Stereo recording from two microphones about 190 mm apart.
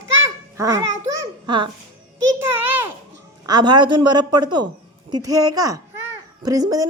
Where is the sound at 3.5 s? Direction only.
20° right (ahead or behind).